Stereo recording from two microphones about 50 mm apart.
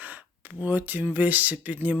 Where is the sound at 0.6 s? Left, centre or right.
Right.